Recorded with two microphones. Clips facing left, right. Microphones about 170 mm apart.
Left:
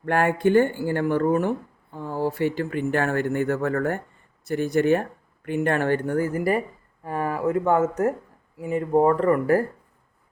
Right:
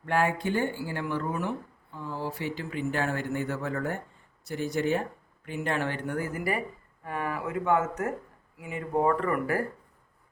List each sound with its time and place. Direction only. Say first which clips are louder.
0.0 s speech: left 6 dB; 55° left (ahead or behind); by 9.6 s 35° left (ahead or behind)